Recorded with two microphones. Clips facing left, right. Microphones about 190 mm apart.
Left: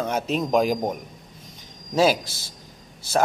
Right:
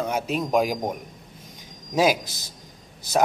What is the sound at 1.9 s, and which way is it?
Speech, 15° right (ahead or behind).